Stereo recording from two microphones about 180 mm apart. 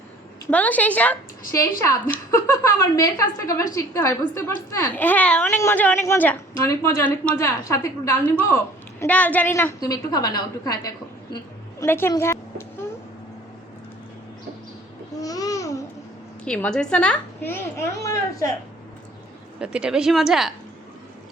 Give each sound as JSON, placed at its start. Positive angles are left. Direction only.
{"t": 0.5, "sound": "a woman's voice", "side_deg": 10}
{"t": 15.1, "sound": "babbling", "side_deg": 20}
{"t": 16.4, "sound": "a woman's voice", "side_deg": 5}
{"t": 19.5, "sound": "speech", "side_deg": -5}